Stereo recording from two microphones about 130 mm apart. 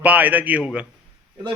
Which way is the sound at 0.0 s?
10° right (ahead or behind).